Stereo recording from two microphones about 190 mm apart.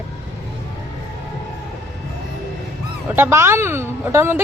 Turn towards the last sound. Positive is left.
turn(degrees=-10)  # may be behind; listen again after turning